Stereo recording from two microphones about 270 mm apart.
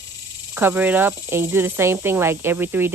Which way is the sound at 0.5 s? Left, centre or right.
Centre.